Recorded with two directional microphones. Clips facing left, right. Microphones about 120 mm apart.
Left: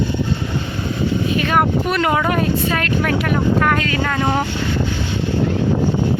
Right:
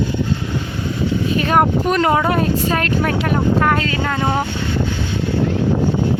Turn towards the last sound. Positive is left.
turn(degrees=-20)  # may be behind; listen again after turning